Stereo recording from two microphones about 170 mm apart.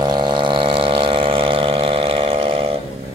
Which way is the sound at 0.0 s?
25° right (ahead or behind).